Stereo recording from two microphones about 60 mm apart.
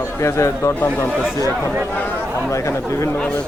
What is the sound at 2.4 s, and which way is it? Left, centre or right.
Speech, left.